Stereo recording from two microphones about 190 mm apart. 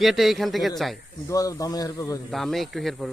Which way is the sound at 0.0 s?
Centre (ahead or behind).